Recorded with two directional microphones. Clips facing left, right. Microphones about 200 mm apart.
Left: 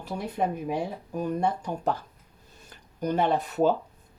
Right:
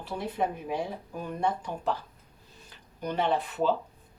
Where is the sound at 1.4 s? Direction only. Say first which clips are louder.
Left 2 dB; 45° left (ahead or behind).